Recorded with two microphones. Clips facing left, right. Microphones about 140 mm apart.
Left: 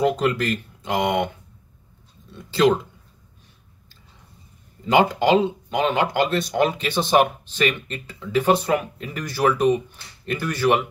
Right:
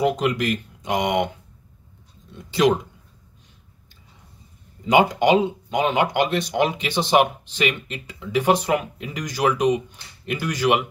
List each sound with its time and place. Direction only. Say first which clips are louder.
0.0 s speech: even; 10° right (ahead or behind)
2.3 s speech: left 1 dB; 15° right (ahead or behind)
4.8 s speech: right 1 dB; 15° right (ahead or behind)